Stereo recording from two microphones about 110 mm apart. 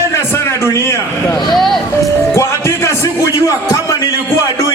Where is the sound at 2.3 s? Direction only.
25° left (ahead or behind).